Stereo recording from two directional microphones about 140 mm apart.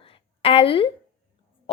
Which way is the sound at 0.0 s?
40° left (ahead or behind).